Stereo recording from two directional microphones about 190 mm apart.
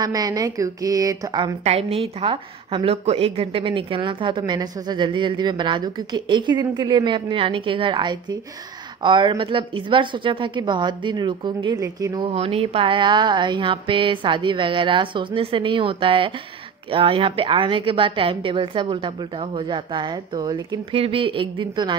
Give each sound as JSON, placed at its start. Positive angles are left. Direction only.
{"t": 0.0, "sound": "a woman's voice", "side_deg": -20}
{"t": 1.6, "sound": "a woman's voice", "side_deg": -35}